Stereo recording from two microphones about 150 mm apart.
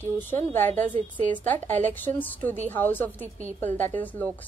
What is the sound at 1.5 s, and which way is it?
A woman's voice, 10° left (ahead or behind).